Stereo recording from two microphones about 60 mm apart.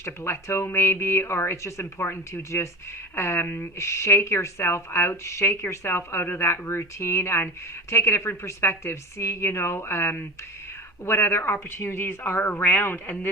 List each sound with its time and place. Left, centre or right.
0.0 s speech: left